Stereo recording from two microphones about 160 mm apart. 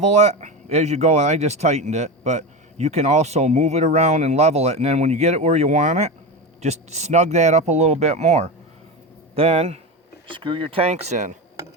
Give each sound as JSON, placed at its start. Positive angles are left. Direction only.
{"t": 0.0, "sound": "speech", "side_deg": -45}